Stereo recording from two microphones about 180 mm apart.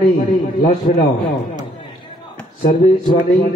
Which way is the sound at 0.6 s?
40° left (ahead or behind).